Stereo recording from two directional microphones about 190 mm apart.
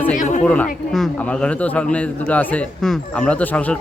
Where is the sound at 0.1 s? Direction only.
40° left (ahead or behind).